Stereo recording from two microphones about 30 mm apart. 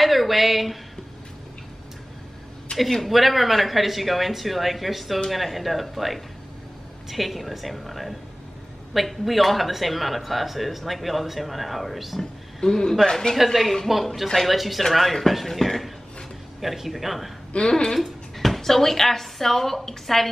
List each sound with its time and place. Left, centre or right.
0.0 s speech: centre
2.7 s a sound: left
3.1 s speech: centre
12.2 s speech: centre
13.4 s speech: centre
17.6 s speech: left
18.4 s a woman's voice: centre